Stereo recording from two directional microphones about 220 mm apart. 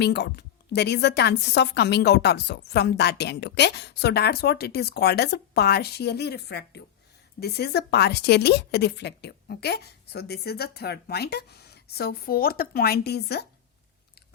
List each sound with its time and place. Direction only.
0.0 s a woman's voice: 50° left (ahead or behind)